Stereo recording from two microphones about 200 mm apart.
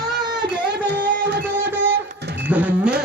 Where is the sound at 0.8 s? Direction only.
55° right (ahead or behind).